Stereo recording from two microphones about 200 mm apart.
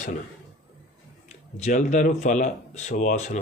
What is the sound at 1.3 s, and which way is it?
Speech, 35° left (ahead or behind).